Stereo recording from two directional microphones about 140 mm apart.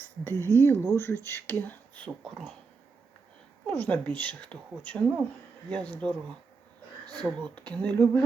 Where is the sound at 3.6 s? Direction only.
10° left (ahead or behind).